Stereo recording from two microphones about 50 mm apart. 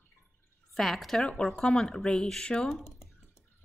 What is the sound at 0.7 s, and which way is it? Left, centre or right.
A woman's voice, centre.